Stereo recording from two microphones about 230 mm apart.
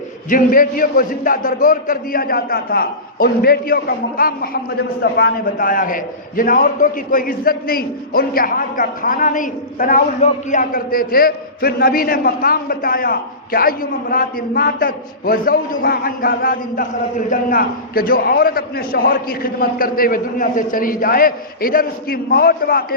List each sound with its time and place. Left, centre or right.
0.3 s a man's voice: left